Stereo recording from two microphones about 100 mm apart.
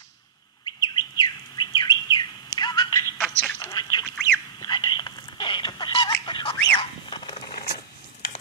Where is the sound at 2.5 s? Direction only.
45° left (ahead or behind).